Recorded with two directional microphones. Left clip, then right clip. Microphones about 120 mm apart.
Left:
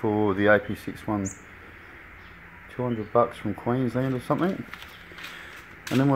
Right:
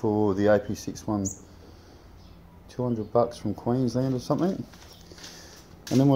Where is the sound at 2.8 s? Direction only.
5° left (ahead or behind).